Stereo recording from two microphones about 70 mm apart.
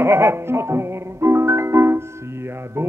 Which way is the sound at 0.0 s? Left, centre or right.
Right.